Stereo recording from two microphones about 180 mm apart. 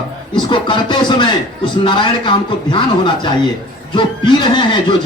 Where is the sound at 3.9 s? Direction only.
25° left (ahead or behind).